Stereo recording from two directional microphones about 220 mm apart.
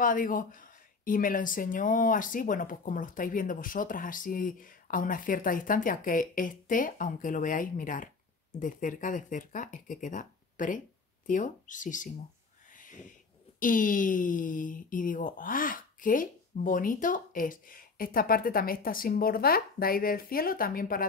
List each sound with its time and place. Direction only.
0.0 s speech: 40° left (ahead or behind)
12.7 s a sound: 35° left (ahead or behind)
13.6 s speech: 40° left (ahead or behind)